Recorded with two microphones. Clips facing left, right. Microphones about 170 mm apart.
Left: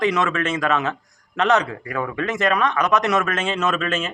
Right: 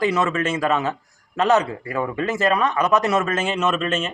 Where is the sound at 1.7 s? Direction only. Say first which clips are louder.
Right 1 dB; 25° right (ahead or behind).